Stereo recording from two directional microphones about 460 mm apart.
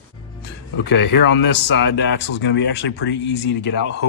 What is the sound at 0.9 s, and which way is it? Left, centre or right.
Speech, left.